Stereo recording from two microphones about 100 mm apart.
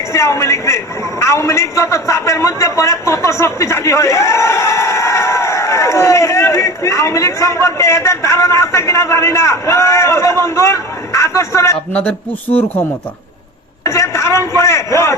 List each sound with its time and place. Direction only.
0.1 s a man's voice: 30° left (ahead or behind)
11.9 s a man's voice: 20° left (ahead or behind)
13.8 s a man's voice: 30° left (ahead or behind)